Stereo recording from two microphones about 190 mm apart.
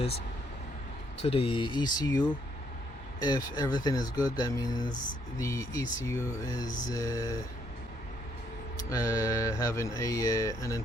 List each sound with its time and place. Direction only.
1.2 s speech: 30° left (ahead or behind)
8.9 s speech: 15° left (ahead or behind)